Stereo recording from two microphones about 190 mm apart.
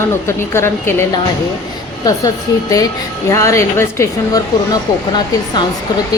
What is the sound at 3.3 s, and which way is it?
Speech, 15° left (ahead or behind).